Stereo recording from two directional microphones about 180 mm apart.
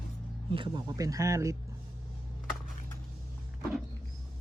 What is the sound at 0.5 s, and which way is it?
Speech, 25° right (ahead or behind).